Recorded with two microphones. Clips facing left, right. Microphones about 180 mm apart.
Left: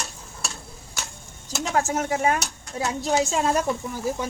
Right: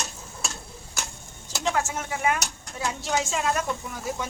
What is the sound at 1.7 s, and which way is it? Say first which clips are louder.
Speech: left 3 dB; 40° left (ahead or behind).